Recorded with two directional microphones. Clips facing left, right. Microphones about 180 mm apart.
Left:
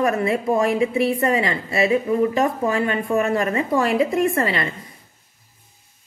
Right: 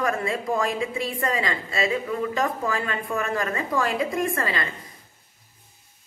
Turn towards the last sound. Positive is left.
turn(degrees=25)  # may be behind; listen again after turning